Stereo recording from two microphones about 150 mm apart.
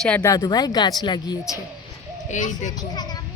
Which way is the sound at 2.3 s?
55° left (ahead or behind).